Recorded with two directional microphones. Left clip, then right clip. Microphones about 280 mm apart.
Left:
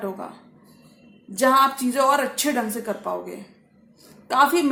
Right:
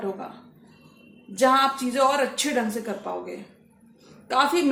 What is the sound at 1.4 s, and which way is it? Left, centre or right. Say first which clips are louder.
A woman's voice: left 2 dB; left.